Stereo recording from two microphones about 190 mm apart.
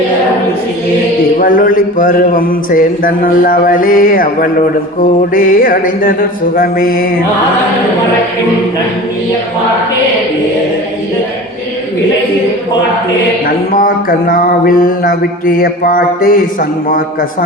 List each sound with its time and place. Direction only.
1.4 s mantra: 45° left (ahead or behind)
13.7 s mantra: 50° left (ahead or behind)